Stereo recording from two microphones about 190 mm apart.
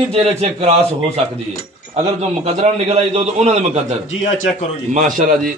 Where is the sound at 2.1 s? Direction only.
35° right (ahead or behind).